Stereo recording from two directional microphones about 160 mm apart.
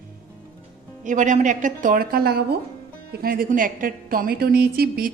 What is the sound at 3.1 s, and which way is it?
A woman's voice, 70° right (ahead or behind).